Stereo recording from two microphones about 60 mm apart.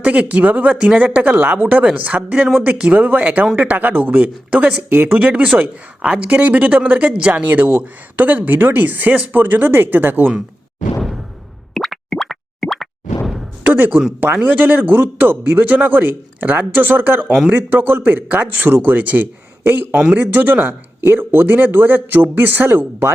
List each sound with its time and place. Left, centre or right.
0.0 s speech: right
1.3 s speech: right
11.7 s plop: centre
13.7 s speech: right